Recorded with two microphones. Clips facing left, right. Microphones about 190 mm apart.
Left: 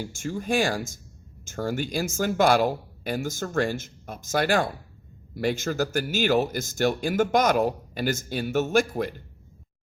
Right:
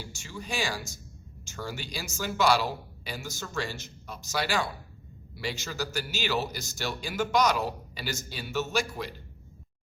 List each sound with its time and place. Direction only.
0.0 s speech: 50° left (ahead or behind)